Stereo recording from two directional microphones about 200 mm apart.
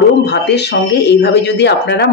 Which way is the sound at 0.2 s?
55° left (ahead or behind).